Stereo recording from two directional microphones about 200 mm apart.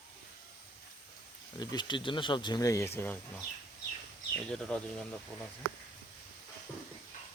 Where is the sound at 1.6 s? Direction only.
20° left (ahead or behind).